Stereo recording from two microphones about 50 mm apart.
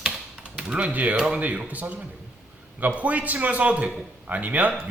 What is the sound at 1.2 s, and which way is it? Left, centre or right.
Speech, centre.